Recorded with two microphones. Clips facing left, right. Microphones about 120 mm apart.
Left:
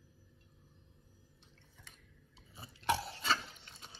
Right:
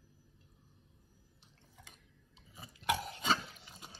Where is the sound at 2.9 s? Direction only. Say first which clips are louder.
Left 1 dB; 30° left (ahead or behind).